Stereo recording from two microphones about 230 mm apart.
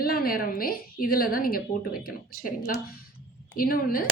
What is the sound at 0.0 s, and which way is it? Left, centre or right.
A woman's voice, left.